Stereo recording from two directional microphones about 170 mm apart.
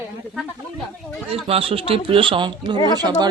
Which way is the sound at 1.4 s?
35° right (ahead or behind).